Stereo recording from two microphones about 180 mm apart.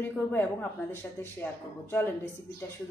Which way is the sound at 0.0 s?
10° left (ahead or behind).